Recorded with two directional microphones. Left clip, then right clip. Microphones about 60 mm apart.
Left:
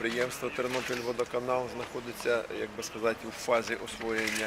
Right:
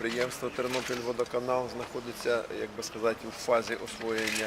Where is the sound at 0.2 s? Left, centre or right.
Centre.